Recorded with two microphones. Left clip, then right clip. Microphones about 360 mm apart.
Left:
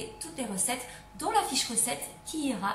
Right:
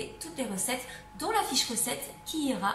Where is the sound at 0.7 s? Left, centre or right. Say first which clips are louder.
Right 1 dB; centre.